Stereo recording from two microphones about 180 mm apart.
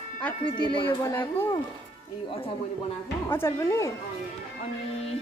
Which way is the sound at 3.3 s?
15° left (ahead or behind).